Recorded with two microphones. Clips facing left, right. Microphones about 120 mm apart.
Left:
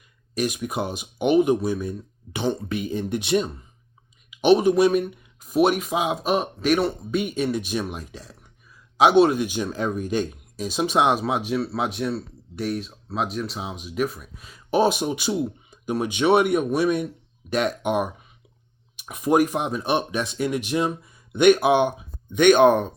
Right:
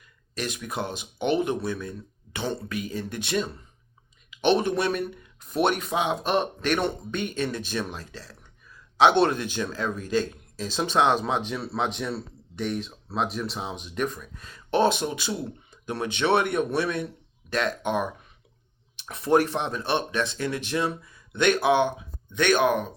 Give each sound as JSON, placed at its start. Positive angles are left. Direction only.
{"t": 0.0, "sound": "speech", "side_deg": 15}
{"t": 4.4, "sound": "speech", "side_deg": 10}